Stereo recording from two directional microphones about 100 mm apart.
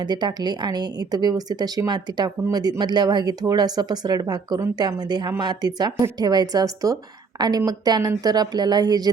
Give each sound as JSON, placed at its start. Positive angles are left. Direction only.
{"t": 0.0, "sound": "speech", "side_deg": -45}